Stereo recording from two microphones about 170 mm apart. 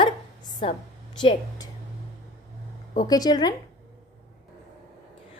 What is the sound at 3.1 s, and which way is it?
Speech, 25° left (ahead or behind).